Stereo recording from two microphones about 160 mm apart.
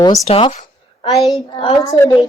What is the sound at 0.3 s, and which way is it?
Speech, 40° left (ahead or behind).